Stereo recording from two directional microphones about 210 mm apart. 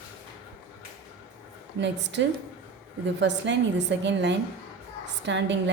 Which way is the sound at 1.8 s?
55° right (ahead or behind).